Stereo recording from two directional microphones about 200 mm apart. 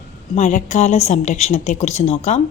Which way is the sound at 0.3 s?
35° left (ahead or behind).